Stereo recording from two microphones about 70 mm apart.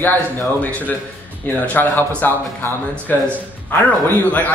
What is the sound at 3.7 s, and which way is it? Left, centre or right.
Speech, left.